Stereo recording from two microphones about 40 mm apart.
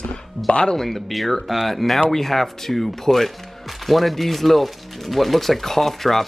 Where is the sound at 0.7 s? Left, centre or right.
Centre.